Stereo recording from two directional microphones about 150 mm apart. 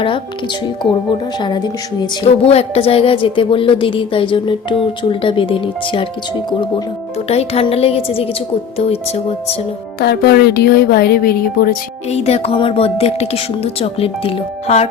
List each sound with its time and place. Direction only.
1.4 s speech: 30° left (ahead or behind)
2.2 s a woman's voice: 45° left (ahead or behind)
7.3 s a woman's voice: 40° left (ahead or behind)
10.0 s speech: 90° left
12.1 s a woman's voice: 45° left (ahead or behind)